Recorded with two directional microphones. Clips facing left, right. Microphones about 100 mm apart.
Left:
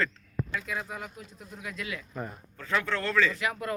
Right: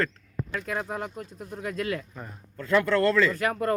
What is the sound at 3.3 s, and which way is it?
Speech, 45° right (ahead or behind).